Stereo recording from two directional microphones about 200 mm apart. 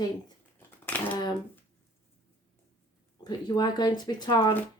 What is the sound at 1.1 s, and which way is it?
Speech, 20° left (ahead or behind).